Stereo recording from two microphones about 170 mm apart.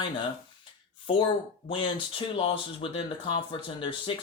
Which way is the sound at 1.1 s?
30° left (ahead or behind).